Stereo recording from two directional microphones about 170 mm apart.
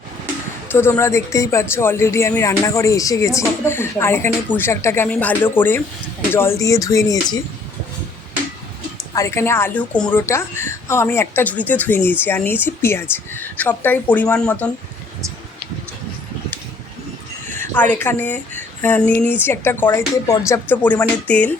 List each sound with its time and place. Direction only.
0.7 s speech: 15° left (ahead or behind)
6.3 s music: 15° left (ahead or behind)
9.1 s speech: 15° left (ahead or behind)
17.6 s speech: 10° left (ahead or behind)